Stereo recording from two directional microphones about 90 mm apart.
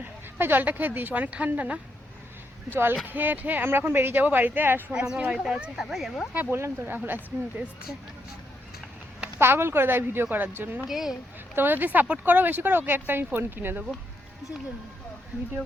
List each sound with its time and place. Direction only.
0.0 s speech: 20° right (ahead or behind)
3.1 s speech: 20° right (ahead or behind)
4.9 s speech: 10° right (ahead or behind)
6.3 s speech: 20° right (ahead or behind)
9.4 s speech: 25° right (ahead or behind)
10.8 s speech: 5° right (ahead or behind)
11.5 s speech: 25° right (ahead or behind)